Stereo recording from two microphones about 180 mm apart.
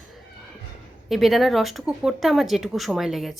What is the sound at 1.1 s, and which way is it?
Speech, centre (ahead or behind).